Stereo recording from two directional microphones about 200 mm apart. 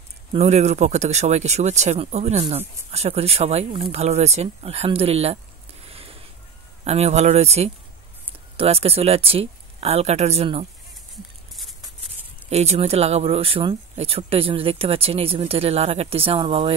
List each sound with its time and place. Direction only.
0.3 s speech: 30° right (ahead or behind)
5.9 s a sound: 30° right (ahead or behind)
6.8 s speech: 35° right (ahead or behind)
12.4 s speech: 30° right (ahead or behind)